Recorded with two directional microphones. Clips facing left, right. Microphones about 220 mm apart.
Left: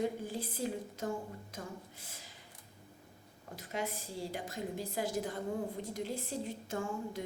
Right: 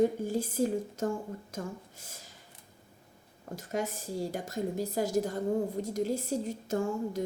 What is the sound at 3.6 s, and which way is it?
A woman's voice, 45° right (ahead or behind).